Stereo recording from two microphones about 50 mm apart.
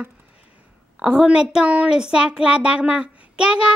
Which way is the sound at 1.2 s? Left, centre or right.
Centre.